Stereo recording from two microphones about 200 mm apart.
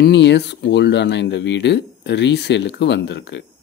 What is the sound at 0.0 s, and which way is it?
Speech, 60° left (ahead or behind).